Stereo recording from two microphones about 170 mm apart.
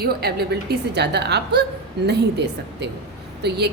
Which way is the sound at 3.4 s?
75° right (ahead or behind).